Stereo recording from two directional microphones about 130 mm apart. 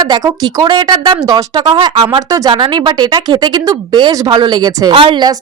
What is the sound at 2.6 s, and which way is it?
A woman's voice, 35° right (ahead or behind).